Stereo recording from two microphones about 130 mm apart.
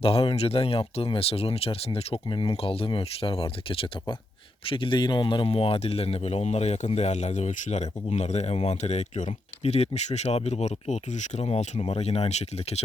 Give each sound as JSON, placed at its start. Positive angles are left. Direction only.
{"t": 0.0, "sound": "a man's voice", "side_deg": 45}